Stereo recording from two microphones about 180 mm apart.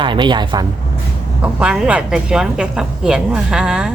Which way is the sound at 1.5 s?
5° right (ahead or behind).